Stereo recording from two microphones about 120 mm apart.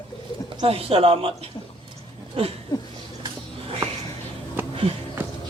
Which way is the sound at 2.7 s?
30° left (ahead or behind).